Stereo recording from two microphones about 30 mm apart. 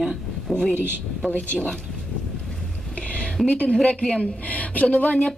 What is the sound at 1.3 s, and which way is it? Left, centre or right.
Speech, left.